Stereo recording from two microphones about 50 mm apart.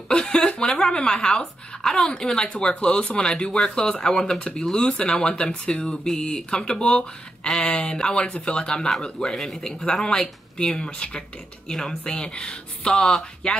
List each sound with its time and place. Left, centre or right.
0.1 s chuckle: centre
0.7 s speech: centre
1.8 s speech: centre
8.7 s a man's voice: centre
10.0 s speech: centre